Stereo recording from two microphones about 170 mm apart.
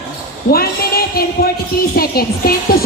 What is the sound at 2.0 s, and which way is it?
Music, 60° left (ahead or behind).